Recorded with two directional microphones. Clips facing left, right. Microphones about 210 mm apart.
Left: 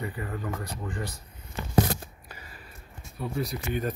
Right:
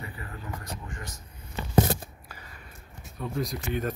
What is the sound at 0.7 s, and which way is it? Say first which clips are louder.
Speech: left 5 dB; 35° left (ahead or behind).